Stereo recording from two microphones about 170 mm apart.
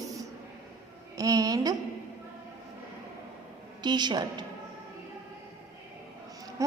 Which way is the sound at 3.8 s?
25° right (ahead or behind).